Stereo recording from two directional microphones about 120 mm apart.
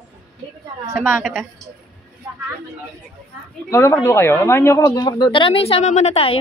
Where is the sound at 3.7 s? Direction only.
20° left (ahead or behind).